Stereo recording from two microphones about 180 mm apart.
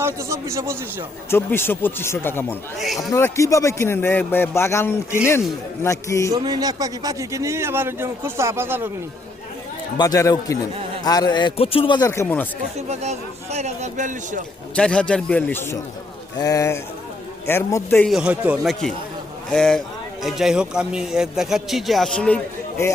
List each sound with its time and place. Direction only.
0.0 s a man's voice: 15° right (ahead or behind)
1.3 s speech: 15° left (ahead or behind)
2.7 s a man's voice: centre (ahead or behind)
3.1 s speech: 15° left (ahead or behind)
6.3 s a man's voice: 20° right (ahead or behind)
10.0 s a man's voice: 20° left (ahead or behind)
12.7 s a man's voice: 40° right (ahead or behind)
14.8 s speech: 5° left (ahead or behind)
18.1 s a man's voice: 5° right (ahead or behind)